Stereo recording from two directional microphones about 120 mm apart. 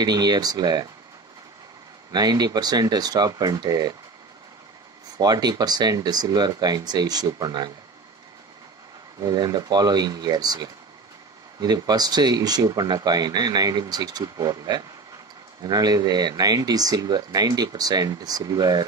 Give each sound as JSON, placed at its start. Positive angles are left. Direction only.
{"t": 0.0, "sound": "speech", "side_deg": -35}
{"t": 2.1, "sound": "speech", "side_deg": -35}
{"t": 5.1, "sound": "speech", "side_deg": -35}
{"t": 9.2, "sound": "speech", "side_deg": -35}